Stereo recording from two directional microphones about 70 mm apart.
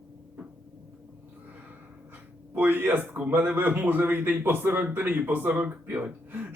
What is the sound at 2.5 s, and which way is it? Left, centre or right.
A man's voice, right.